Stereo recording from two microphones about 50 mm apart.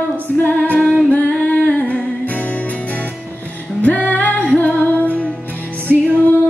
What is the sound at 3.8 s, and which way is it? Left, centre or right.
Music, left.